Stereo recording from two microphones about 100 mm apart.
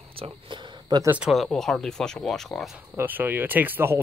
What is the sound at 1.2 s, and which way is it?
Speech, centre (ahead or behind).